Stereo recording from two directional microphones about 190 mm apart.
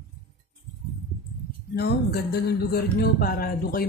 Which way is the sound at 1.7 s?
60° left (ahead or behind).